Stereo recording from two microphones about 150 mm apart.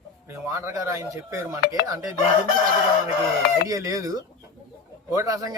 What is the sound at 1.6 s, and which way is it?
Speech, 90° left.